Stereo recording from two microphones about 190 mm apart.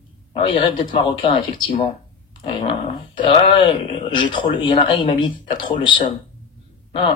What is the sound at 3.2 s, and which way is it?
A man's voice, 30° left (ahead or behind).